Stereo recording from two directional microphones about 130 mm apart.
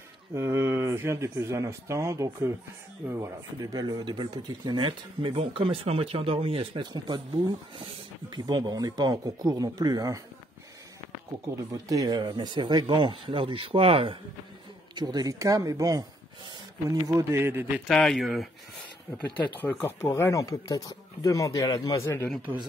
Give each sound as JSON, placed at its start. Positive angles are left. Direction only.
{"t": 0.3, "sound": "speech", "side_deg": -20}
{"t": 8.5, "sound": "speech", "side_deg": -30}
{"t": 11.5, "sound": "speech", "side_deg": -25}
{"t": 15.0, "sound": "speech", "side_deg": -30}
{"t": 17.8, "sound": "speech", "side_deg": 0}
{"t": 19.1, "sound": "speech", "side_deg": 15}